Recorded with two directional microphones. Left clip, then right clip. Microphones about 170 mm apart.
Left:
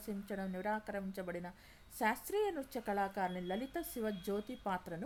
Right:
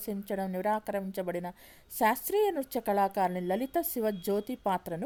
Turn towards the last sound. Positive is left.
turn(degrees=-45)  # may be behind; listen again after turning